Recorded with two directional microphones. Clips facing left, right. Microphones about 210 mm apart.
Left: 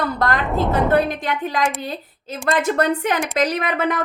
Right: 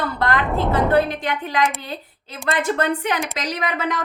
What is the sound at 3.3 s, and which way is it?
Speech, 55° left (ahead or behind).